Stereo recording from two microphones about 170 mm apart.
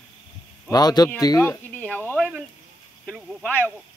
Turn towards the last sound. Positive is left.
turn(degrees=10)  # may be behind; listen again after turning